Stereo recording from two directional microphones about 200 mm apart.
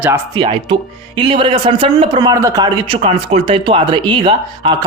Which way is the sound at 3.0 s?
30° right (ahead or behind).